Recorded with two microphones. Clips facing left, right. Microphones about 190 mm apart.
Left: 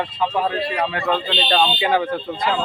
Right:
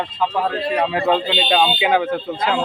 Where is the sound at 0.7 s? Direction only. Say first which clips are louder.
Right 4 dB; 25° right (ahead or behind).